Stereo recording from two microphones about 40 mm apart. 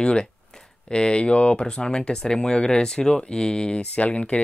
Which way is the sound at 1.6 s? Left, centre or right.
Centre.